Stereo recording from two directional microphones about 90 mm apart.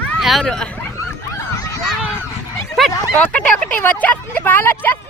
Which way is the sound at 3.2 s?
15° left (ahead or behind).